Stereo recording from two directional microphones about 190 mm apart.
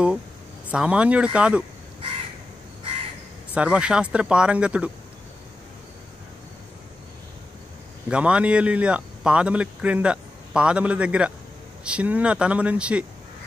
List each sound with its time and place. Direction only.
0.7 s speech: 5° right (ahead or behind)
3.5 s speech: 5° right (ahead or behind)
8.1 s speech: 5° right (ahead or behind)